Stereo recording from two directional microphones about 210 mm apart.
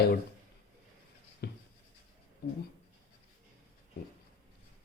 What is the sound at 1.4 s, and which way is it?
Writing, 50° left (ahead or behind).